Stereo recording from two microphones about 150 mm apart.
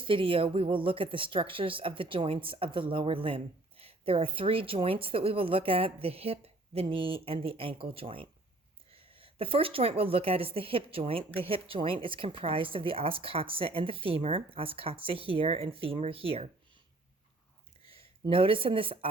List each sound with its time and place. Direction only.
0.0 s speech: 35° right (ahead or behind)
17.9 s speech: 35° right (ahead or behind)